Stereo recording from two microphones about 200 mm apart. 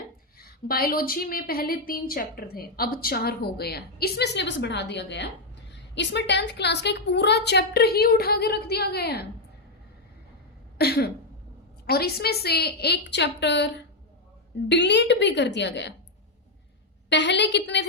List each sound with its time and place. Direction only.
0.3 s a woman's voice: 50° left (ahead or behind)
10.8 s a sound: 55° left (ahead or behind)
11.9 s a woman's voice: 50° left (ahead or behind)
17.1 s a woman's voice: 60° left (ahead or behind)